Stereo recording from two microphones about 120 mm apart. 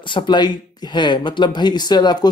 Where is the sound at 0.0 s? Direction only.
40° left (ahead or behind).